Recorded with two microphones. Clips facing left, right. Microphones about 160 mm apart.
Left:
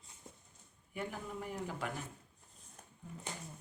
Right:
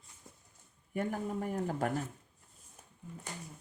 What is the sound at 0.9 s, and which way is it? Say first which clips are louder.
Speech: right 7 dB; 45° right (ahead or behind).